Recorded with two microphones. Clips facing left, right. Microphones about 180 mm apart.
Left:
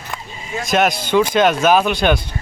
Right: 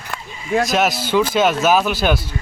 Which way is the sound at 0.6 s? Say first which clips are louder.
Left 1 dB; centre (ahead or behind).